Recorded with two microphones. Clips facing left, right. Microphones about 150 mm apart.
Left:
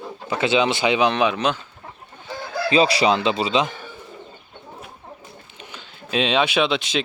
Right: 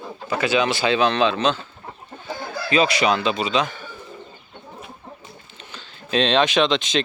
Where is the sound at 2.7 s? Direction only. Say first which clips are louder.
Left 1 dB; 30° left (ahead or behind).